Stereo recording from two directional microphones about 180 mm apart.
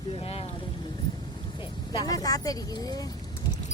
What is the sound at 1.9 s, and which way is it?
Speech, 25° left (ahead or behind).